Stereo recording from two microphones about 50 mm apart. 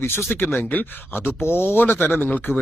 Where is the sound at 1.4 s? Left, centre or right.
Left.